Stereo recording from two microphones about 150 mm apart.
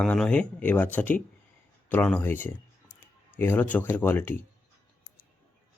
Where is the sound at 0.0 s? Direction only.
5° left (ahead or behind).